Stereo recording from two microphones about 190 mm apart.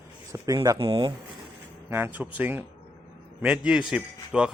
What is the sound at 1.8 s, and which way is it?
A man's voice, 10° right (ahead or behind).